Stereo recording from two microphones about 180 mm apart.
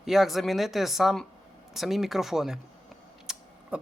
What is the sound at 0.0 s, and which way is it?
Speech, centre (ahead or behind).